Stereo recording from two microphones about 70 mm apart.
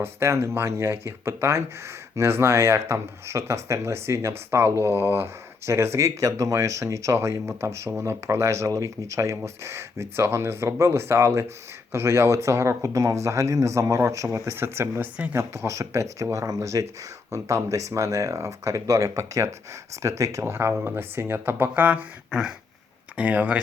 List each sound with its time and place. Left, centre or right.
0.0 s speech: right
22.3 s speech: centre
23.1 s speech: right